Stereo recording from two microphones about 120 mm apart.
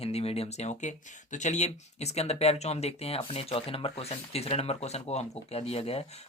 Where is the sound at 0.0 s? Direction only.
55° left (ahead or behind).